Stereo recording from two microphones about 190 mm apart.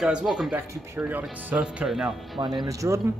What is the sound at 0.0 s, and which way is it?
Speech, 5° right (ahead or behind).